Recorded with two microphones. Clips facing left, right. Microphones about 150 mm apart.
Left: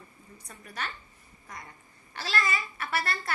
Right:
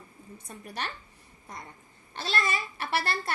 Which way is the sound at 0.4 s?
30° right (ahead or behind).